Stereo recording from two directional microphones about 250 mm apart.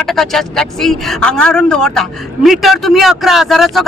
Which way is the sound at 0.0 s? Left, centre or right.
Centre.